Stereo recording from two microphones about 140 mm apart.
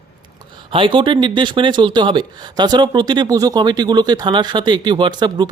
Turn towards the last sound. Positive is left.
turn(degrees=-35)  # may be behind; listen again after turning